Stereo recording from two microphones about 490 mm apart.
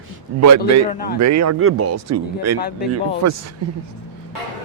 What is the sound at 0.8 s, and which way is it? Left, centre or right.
Speech, centre.